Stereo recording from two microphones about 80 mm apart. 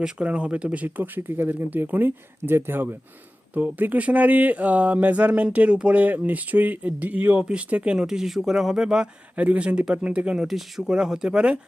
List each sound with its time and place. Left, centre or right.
0.0 s speech: centre